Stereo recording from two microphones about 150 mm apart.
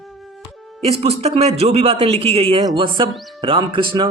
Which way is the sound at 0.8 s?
40° right (ahead or behind).